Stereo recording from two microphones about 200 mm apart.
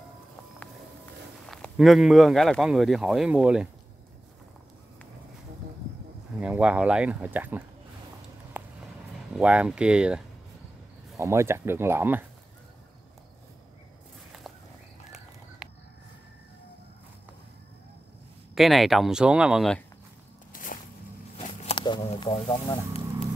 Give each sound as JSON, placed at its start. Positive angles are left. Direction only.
{"t": 1.5, "sound": "speech", "side_deg": 0}
{"t": 6.4, "sound": "speech", "side_deg": -5}
{"t": 8.5, "sound": "a sound", "side_deg": -10}
{"t": 9.4, "sound": "speech", "side_deg": -5}
{"t": 18.5, "sound": "speech", "side_deg": 0}
{"t": 20.5, "sound": "a sound", "side_deg": 45}
{"t": 21.4, "sound": "speech", "side_deg": 25}